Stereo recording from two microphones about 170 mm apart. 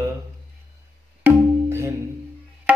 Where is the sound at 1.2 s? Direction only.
15° right (ahead or behind).